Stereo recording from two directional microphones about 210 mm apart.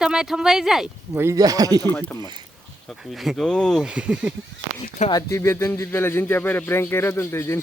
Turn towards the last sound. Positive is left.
turn(degrees=10)  # may be behind; listen again after turning